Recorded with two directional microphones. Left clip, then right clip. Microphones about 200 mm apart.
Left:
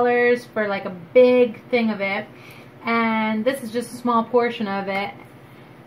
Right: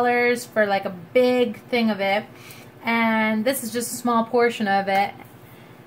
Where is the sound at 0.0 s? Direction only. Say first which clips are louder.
Left 2 dB; 25° right (ahead or behind).